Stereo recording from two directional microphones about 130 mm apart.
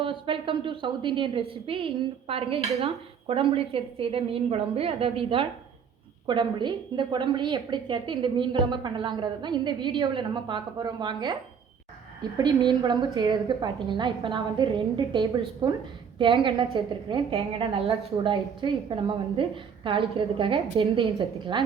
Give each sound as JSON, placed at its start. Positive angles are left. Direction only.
{"t": 0.0, "sound": "a woman's voice", "side_deg": -40}
{"t": 12.4, "sound": "a woman's voice", "side_deg": -35}
{"t": 15.1, "sound": "a woman's voice", "side_deg": -30}